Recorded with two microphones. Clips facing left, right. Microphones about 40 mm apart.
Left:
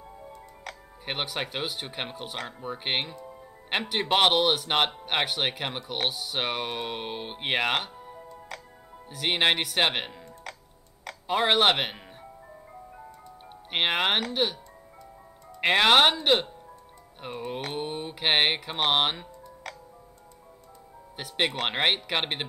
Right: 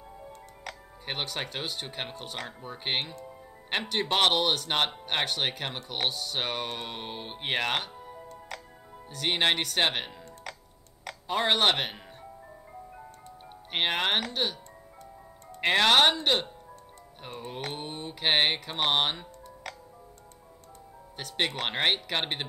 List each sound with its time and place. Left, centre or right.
0.7 s speech: centre
3.3 s music: centre
3.9 s speech: centre
7.9 s music: centre
9.1 s speech: centre
13.7 s speech: centre
15.6 s speech: centre
17.5 s mantra: centre
21.2 s speech: centre